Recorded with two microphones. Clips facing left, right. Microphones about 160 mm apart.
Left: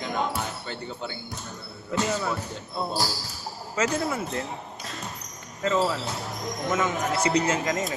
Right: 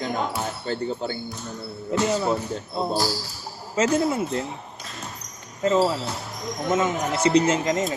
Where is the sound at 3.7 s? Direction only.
25° right (ahead or behind).